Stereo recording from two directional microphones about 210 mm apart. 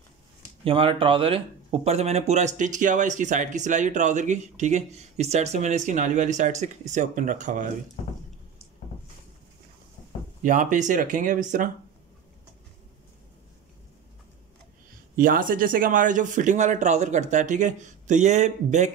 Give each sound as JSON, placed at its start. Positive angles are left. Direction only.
{"t": 0.7, "sound": "speech", "side_deg": -25}
{"t": 10.4, "sound": "speech", "side_deg": -40}
{"t": 15.1, "sound": "speech", "side_deg": -40}